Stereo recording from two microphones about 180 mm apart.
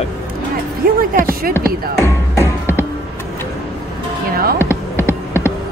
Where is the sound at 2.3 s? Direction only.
15° left (ahead or behind).